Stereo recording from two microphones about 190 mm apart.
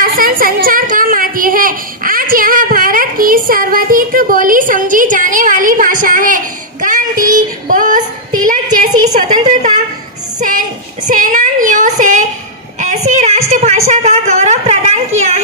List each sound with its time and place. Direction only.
0.0 s speech: 45° right (ahead or behind)
8.6 s a woman's voice: 20° right (ahead or behind)
9.1 s a woman's voice: 40° right (ahead or behind)
11.1 s female singing: 45° right (ahead or behind)
12.8 s a sound: 40° right (ahead or behind)